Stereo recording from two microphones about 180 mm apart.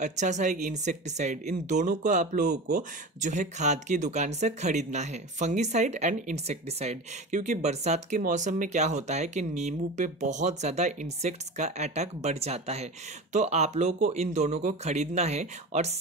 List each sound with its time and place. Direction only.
0.0 s speech: 40° right (ahead or behind)